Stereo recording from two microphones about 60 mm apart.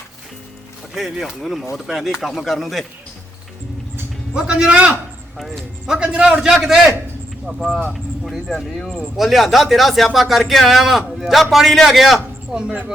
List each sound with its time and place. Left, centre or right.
1.2 s speech: centre
4.4 s a man's voice: centre
5.4 s speech: centre
5.8 s a man's voice: centre
7.9 s a man's voice: centre